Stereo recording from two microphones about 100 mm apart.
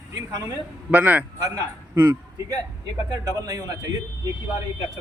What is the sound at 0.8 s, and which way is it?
Speech, 15° right (ahead or behind).